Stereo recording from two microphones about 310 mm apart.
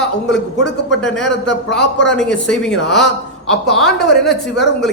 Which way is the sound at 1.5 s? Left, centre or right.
Left.